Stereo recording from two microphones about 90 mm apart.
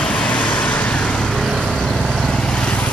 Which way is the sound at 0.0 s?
15° left (ahead or behind).